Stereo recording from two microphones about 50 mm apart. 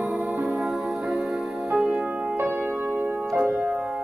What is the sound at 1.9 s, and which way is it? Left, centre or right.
Music, right.